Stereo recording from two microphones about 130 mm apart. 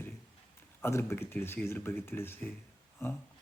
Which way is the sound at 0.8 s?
20° left (ahead or behind).